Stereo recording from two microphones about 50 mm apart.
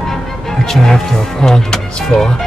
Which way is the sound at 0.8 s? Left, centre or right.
Centre.